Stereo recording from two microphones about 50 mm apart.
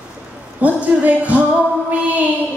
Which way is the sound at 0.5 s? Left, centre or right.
Right.